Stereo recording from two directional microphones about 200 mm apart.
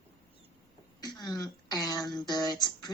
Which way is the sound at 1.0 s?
20° left (ahead or behind).